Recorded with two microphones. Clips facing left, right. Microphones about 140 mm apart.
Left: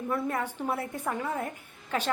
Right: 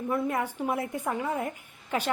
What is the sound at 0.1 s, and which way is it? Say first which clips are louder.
A woman's voice: right 2 dB; 10° right (ahead or behind).